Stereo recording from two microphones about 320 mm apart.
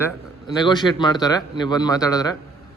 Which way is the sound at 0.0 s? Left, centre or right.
Centre.